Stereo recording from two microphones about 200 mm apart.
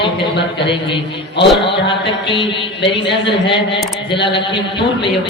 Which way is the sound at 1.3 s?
25° left (ahead or behind).